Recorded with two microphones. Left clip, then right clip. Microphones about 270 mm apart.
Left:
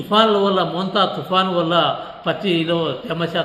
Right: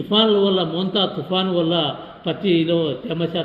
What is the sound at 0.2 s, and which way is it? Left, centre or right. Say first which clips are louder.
A man's voice: left 2 dB; left.